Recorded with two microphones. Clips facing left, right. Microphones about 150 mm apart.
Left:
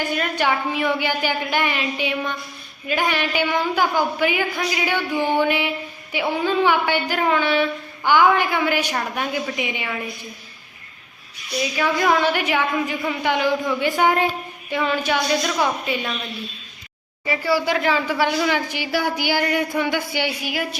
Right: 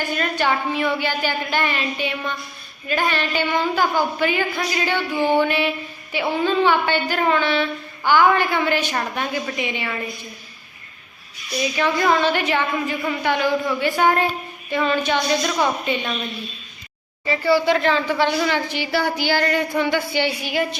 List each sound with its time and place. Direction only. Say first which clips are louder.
0.1 s a woman's voice: right 2 dB; 15° left (ahead or behind)
11.8 s a woman's voice: even; 10° left (ahead or behind)
17.2 s a woman's voice: right 3 dB; 10° left (ahead or behind)